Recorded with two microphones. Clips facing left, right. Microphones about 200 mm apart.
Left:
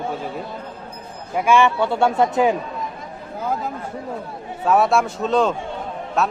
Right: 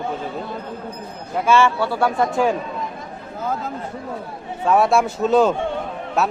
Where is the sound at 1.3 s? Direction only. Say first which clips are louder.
Even; 15° left (ahead or behind).